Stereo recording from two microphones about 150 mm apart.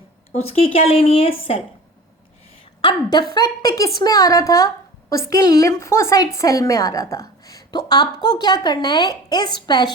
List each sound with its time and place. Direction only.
0.3 s speech: 40° left (ahead or behind)
2.8 s a woman's voice: 30° left (ahead or behind)